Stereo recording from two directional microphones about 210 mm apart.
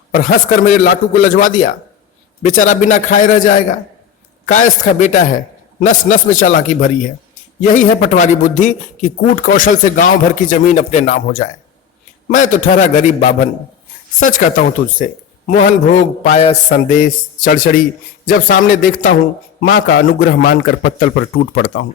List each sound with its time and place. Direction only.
0.1 s a man's voice: 40° left (ahead or behind)